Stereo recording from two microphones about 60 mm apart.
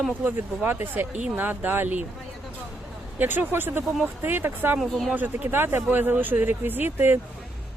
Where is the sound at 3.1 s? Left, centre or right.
Right.